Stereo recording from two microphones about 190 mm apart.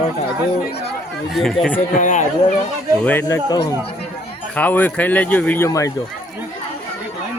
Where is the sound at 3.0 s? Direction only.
10° left (ahead or behind).